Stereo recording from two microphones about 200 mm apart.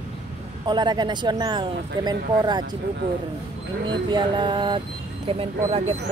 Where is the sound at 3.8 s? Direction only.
25° right (ahead or behind).